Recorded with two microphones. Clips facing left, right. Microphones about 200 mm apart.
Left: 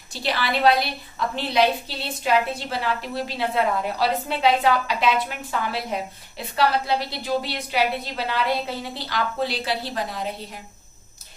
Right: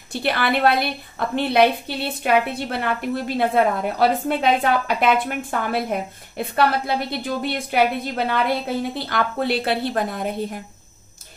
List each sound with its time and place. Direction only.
0.1 s a woman's voice: 55° right (ahead or behind)